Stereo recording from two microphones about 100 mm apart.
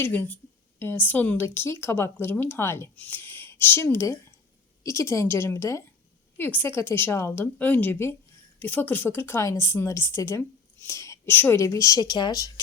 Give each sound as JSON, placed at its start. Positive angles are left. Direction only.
{"t": 0.0, "sound": "a woman's voice", "side_deg": 20}